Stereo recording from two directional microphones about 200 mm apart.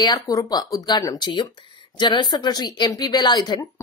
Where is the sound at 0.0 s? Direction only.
20° left (ahead or behind).